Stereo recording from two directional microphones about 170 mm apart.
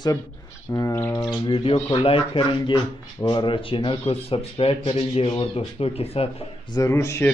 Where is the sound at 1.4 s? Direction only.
30° left (ahead or behind).